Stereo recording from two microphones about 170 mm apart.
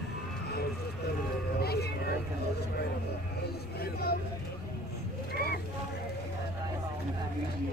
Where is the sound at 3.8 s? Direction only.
65° left (ahead or behind).